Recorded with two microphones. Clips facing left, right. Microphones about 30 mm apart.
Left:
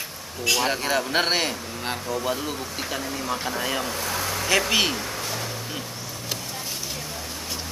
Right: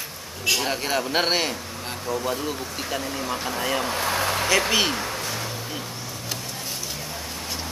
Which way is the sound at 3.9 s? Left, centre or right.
Right.